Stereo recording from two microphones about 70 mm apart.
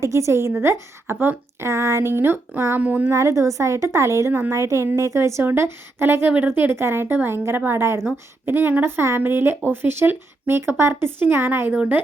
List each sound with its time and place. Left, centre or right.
0.0 s a woman's voice: right
1.6 s a woman's voice: right
2.8 s speech: right
3.1 s a woman's voice: right
4.3 s a woman's voice: right
8.4 s a woman's voice: right